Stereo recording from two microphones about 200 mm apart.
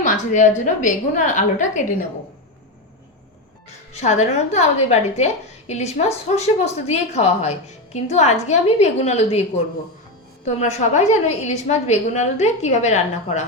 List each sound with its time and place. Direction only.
0.0 s a woman's voice: 40° left (ahead or behind)
3.9 s a woman's voice: 35° left (ahead or behind)